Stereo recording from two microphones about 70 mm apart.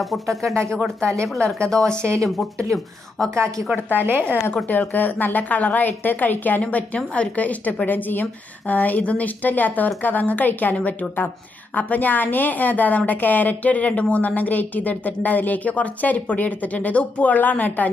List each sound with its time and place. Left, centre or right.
0.0 s speech: centre
1.0 s speech: right
1.7 s speech: centre
2.0 s speech: right
4.0 s speech: right
4.6 s a woman's voice: left